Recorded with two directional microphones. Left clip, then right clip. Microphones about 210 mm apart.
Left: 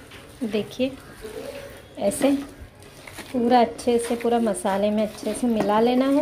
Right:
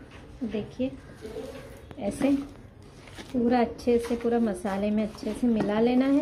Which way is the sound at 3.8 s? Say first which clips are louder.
Left 3 dB; 10° left (ahead or behind).